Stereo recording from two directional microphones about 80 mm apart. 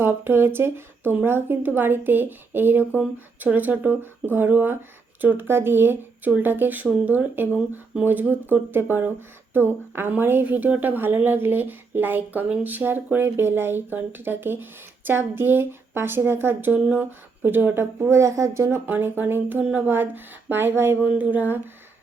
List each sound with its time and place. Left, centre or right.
0.0 s speech: right
18.9 s speech: right